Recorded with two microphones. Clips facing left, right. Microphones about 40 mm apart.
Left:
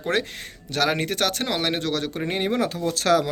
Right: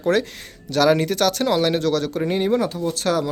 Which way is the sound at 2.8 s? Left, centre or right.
Left.